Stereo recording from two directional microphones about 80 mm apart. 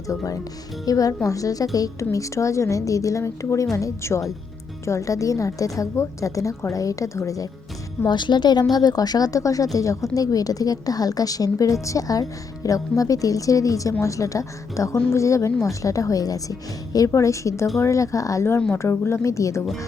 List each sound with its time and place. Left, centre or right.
0.1 s a woman's voice: left
8.0 s a woman's voice: left